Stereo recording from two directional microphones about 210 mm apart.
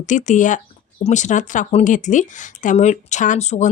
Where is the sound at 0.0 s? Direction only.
35° left (ahead or behind).